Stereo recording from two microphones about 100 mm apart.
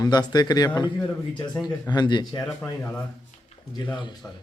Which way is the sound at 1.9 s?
50° left (ahead or behind).